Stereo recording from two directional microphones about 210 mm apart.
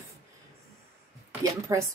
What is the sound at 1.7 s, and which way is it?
Speech, 15° right (ahead or behind).